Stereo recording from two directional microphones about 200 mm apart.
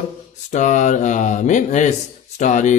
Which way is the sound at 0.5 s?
35° left (ahead or behind).